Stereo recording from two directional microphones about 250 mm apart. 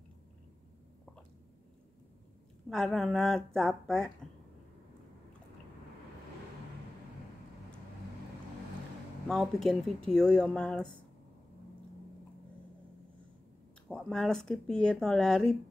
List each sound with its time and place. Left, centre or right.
2.7 s speech: centre
9.3 s speech: centre
13.8 s speech: centre